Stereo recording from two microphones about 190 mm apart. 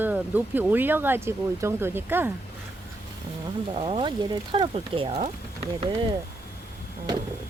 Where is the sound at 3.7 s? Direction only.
30° right (ahead or behind).